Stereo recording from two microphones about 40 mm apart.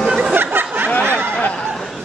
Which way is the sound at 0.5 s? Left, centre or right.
Right.